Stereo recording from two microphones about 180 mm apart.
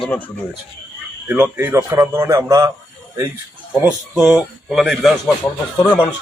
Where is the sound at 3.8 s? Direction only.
5° right (ahead or behind).